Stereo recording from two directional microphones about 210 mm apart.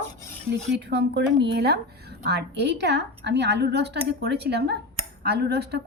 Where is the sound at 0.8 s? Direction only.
55° right (ahead or behind).